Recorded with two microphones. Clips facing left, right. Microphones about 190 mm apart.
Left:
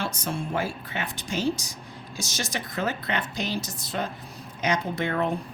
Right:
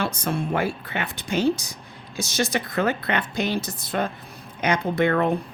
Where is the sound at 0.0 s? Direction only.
60° right (ahead or behind).